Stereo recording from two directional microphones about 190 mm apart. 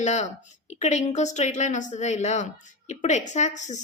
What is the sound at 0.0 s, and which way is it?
A woman's voice, 35° left (ahead or behind).